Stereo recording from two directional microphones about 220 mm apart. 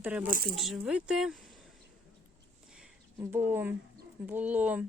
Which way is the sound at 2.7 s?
5° right (ahead or behind).